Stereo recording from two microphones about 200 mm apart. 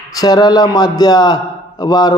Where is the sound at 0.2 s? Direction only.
20° left (ahead or behind).